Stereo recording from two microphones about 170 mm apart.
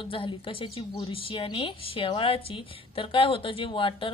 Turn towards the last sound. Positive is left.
turn(degrees=30)  # may be behind; listen again after turning